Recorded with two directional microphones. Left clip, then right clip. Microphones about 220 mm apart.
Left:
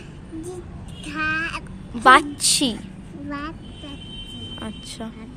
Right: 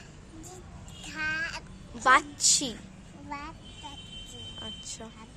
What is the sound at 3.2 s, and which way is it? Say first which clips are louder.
Speech: left 8 dB; 10° right (ahead or behind).